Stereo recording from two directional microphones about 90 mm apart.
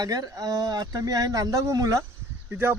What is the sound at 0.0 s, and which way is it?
Speech, 45° right (ahead or behind).